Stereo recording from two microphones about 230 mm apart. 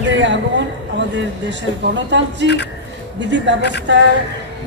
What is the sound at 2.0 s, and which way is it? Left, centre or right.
A woman's voice, right.